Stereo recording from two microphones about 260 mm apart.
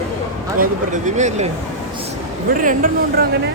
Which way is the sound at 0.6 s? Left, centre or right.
Right.